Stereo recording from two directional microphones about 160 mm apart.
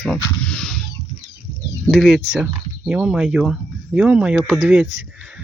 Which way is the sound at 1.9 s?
Centre (ahead or behind).